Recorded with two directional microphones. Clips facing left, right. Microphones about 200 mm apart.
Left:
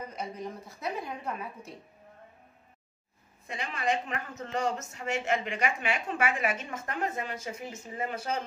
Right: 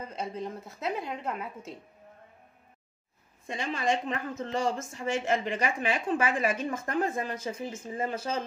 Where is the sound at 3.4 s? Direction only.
30° right (ahead or behind).